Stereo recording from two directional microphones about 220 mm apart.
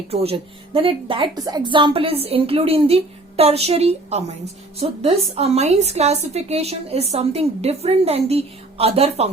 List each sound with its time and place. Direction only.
0.1 s a woman's voice: 25° right (ahead or behind)